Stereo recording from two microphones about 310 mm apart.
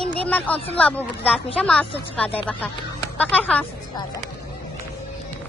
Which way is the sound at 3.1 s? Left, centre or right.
Centre.